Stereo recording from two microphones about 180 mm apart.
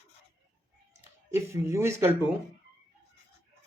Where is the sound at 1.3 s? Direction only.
15° right (ahead or behind).